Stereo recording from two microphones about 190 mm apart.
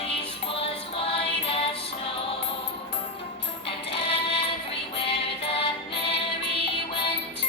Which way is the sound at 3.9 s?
30° left (ahead or behind).